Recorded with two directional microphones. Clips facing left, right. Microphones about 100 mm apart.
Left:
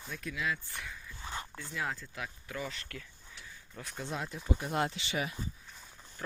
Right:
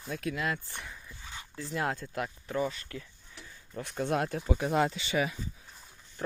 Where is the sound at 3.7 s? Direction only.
35° right (ahead or behind).